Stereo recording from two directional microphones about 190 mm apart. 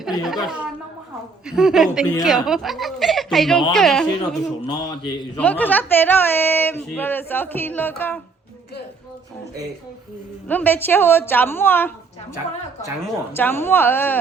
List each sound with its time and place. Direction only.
0.0 s speech: centre (ahead or behind)
4.6 s a man's voice: 20° left (ahead or behind)
5.4 s speech: 10° left (ahead or behind)
10.5 s speech: 10° left (ahead or behind)
13.3 s speech: 10° left (ahead or behind)